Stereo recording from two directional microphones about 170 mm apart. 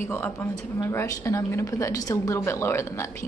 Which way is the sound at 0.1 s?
15° left (ahead or behind).